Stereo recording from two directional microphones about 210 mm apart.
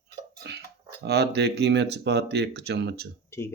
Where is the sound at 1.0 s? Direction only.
50° right (ahead or behind).